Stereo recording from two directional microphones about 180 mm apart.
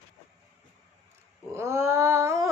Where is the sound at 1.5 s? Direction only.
15° right (ahead or behind).